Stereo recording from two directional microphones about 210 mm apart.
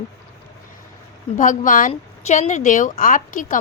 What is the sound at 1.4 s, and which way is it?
A woman's voice, 40° left (ahead or behind).